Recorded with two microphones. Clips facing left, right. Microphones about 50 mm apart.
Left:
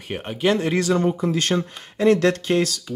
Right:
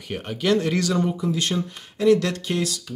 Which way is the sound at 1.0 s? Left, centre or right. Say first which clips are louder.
Left 2 dB; left.